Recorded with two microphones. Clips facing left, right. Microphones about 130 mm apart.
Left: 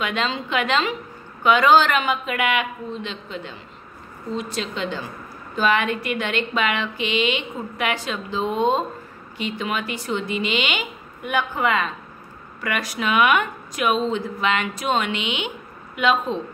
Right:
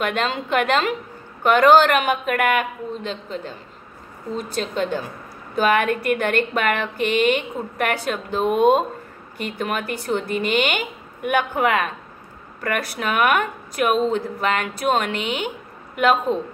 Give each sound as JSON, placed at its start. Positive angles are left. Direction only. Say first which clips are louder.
{"t": 0.0, "sound": "speech", "louder": "right 2 dB", "side_deg": -50}
{"t": 12.6, "sound": "speech", "louder": "right 1 dB", "side_deg": -45}